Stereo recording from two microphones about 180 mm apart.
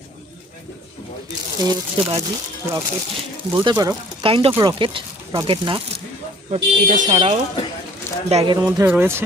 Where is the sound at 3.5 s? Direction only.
25° right (ahead or behind).